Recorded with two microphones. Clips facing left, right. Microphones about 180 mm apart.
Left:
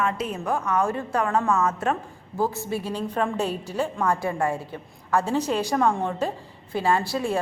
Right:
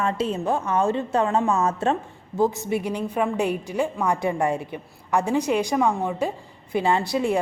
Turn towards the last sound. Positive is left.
turn(degrees=-20)  # may be behind; listen again after turning